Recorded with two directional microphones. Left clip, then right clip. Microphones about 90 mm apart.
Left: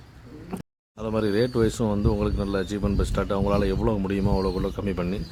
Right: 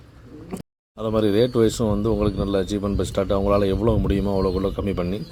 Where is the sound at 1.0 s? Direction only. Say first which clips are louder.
Right 5 dB; 30° right (ahead or behind).